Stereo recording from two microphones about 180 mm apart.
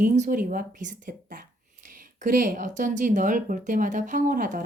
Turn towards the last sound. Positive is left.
turn(degrees=-45)  # may be behind; listen again after turning